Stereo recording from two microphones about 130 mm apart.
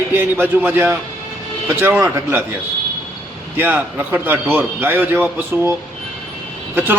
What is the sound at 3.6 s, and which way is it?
A man's voice, 15° right (ahead or behind).